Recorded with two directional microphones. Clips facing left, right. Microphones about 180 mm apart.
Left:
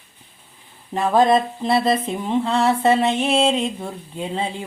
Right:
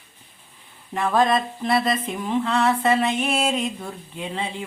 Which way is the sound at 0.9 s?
25° left (ahead or behind).